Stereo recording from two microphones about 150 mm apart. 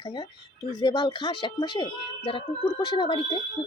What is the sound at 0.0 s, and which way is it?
A woman's voice, 30° left (ahead or behind).